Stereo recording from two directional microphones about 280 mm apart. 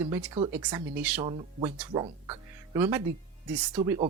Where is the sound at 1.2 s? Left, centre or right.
Centre.